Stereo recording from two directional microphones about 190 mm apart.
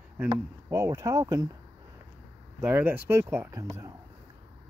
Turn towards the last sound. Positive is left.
turn(degrees=-15)  # may be behind; listen again after turning